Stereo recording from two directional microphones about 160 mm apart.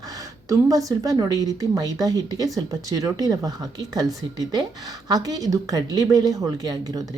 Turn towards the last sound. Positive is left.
turn(degrees=-25)  # may be behind; listen again after turning